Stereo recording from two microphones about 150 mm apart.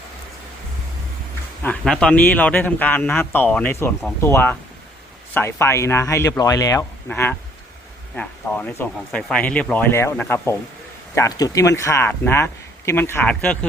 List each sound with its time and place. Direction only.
1.6 s speech: 5° left (ahead or behind)